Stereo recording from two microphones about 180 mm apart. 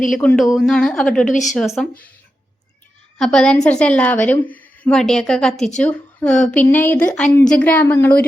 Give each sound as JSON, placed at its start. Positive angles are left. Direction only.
{"t": 0.2, "sound": "a woman's voice", "side_deg": 10}
{"t": 1.2, "sound": "a woman's voice", "side_deg": 45}
{"t": 1.5, "sound": "a woman's voice", "side_deg": 0}
{"t": 3.2, "sound": "a woman's voice", "side_deg": 5}